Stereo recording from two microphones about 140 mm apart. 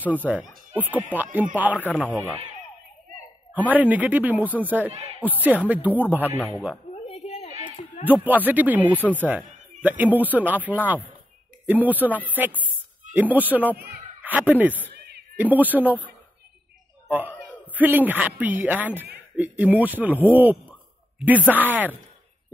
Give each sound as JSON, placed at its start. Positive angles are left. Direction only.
{"t": 0.0, "sound": "speech", "side_deg": -10}
{"t": 3.5, "sound": "speech", "side_deg": -10}
{"t": 6.9, "sound": "a sound", "side_deg": 45}
{"t": 8.0, "sound": "a man's voice", "side_deg": -10}
{"t": 17.1, "sound": "a man's voice", "side_deg": -10}